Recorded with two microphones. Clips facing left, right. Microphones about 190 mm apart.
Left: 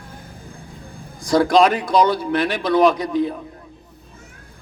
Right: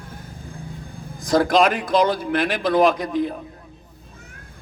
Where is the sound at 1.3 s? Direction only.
50° right (ahead or behind).